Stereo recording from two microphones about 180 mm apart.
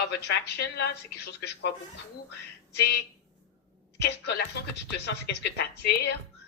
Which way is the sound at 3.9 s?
65° left (ahead or behind).